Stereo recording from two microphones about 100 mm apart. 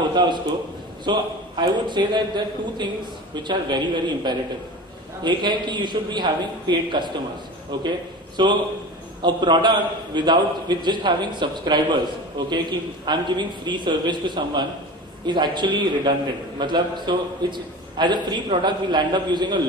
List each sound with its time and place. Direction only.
0.1 s a man's voice: 45° right (ahead or behind)
1.6 s a man's voice: 50° right (ahead or behind)